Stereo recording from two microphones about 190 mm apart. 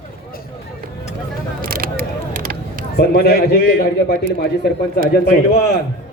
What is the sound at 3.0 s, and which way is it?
Speech, 55° left (ahead or behind).